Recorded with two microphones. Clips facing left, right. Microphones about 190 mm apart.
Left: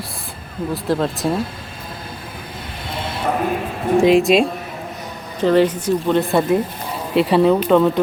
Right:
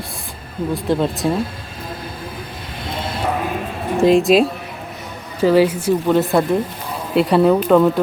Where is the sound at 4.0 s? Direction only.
Centre (ahead or behind).